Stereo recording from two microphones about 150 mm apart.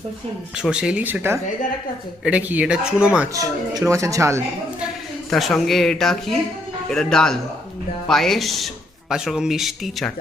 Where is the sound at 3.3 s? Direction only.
20° right (ahead or behind).